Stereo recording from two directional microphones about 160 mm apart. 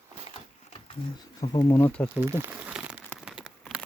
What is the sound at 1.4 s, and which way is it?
Speech, 25° left (ahead or behind).